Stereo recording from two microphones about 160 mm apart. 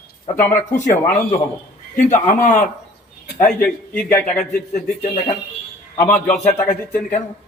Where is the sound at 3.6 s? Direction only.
10° left (ahead or behind).